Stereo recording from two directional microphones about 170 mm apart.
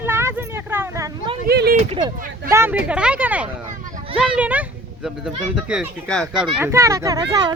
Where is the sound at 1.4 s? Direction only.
70° right (ahead or behind).